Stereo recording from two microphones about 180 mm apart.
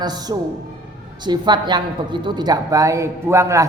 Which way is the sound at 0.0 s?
20° right (ahead or behind).